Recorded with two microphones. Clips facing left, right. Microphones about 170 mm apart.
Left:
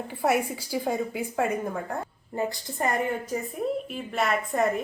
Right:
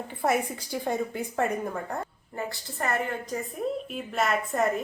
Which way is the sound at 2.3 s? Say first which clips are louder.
Left 6 dB; 20° left (ahead or behind).